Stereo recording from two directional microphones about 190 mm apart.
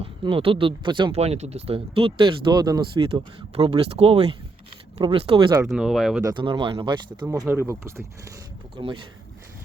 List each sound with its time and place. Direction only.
0.0 s speech: 30° right (ahead or behind)
5.6 s speech: centre (ahead or behind)
6.2 s speech: 25° right (ahead or behind)
7.3 s speech: 10° right (ahead or behind)
8.7 s speech: 25° right (ahead or behind)